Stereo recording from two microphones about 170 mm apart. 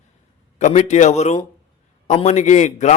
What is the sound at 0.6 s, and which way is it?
A man's voice, 40° left (ahead or behind).